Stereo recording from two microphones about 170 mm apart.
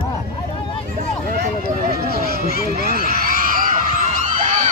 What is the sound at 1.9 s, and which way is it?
Run, 65° right (ahead or behind).